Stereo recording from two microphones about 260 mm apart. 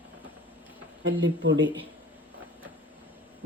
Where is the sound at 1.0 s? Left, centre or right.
Right.